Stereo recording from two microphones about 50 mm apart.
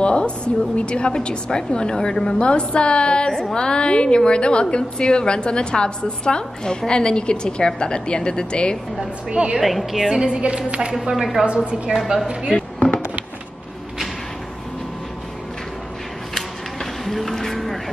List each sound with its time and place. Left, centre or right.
0.0 s a sound: centre
0.7 s a woman's voice: left
9.3 s a woman's voice: centre
9.6 s a woman's voice: centre
10.1 s a woman's voice: centre
11.1 s a woman's voice: centre
11.4 s a woman's voice: right
12.5 s fireworks: centre
17.0 s a sound: centre